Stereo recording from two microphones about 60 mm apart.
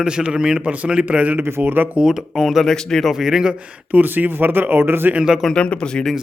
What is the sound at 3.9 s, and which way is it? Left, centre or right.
Speech, right.